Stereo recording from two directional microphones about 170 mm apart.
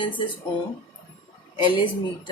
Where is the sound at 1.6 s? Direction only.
25° left (ahead or behind).